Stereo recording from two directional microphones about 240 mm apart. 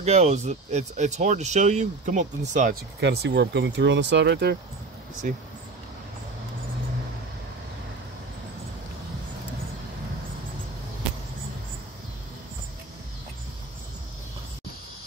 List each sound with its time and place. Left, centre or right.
0.0 s speech: right
3.0 s speech: right